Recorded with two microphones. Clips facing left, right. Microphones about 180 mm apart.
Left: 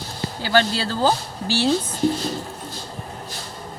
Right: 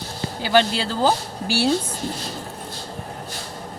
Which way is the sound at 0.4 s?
15° right (ahead or behind).